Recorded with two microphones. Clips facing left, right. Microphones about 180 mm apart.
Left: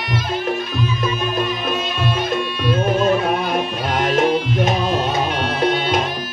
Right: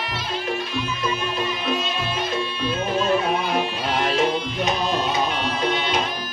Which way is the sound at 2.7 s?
50° left (ahead or behind).